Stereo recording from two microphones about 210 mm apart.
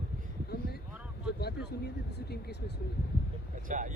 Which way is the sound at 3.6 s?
35° right (ahead or behind).